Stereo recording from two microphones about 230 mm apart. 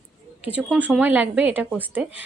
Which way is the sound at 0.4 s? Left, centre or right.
Centre.